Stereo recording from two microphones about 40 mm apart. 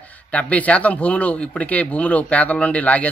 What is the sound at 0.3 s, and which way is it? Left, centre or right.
Speech, left.